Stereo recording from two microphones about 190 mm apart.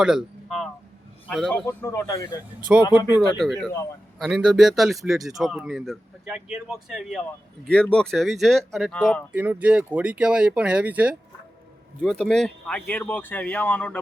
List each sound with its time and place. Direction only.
0.0 s a sound: 5° right (ahead or behind)
1.3 s speech: centre (ahead or behind)
1.6 s speech: 15° left (ahead or behind)
2.7 s speech: 5° right (ahead or behind)
12.0 s speech: centre (ahead or behind)